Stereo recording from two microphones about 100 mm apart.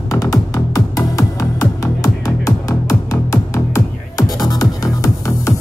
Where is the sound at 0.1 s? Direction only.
35° left (ahead or behind).